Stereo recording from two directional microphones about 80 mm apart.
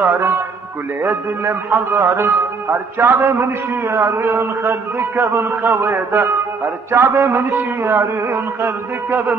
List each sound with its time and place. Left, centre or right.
0.0 s a man's voice: right